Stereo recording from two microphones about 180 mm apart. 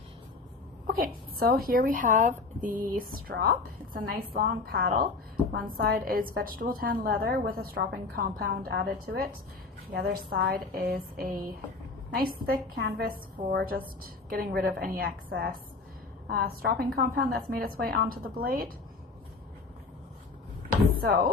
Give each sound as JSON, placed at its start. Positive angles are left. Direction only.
{"t": 0.9, "sound": "a woman's voice", "side_deg": -55}
{"t": 21.0, "sound": "a woman's voice", "side_deg": -55}